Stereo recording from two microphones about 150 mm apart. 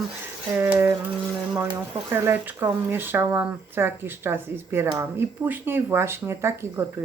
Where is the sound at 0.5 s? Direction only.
15° right (ahead or behind).